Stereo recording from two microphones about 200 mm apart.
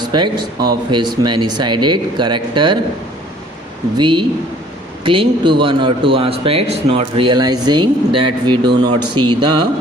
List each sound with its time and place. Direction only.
0.0 s a sound: 20° right (ahead or behind)
0.9 s speech: 25° right (ahead or behind)
3.9 s speech: 20° right (ahead or behind)